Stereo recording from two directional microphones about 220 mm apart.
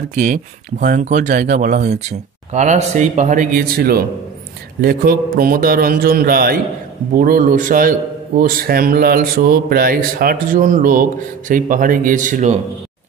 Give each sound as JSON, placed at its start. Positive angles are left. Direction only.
{"t": 0.1, "sound": "a man's voice", "side_deg": -35}